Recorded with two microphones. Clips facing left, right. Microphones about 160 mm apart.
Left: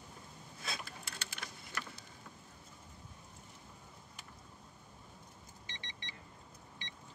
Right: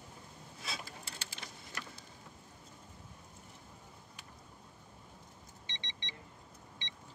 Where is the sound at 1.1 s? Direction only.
25° right (ahead or behind).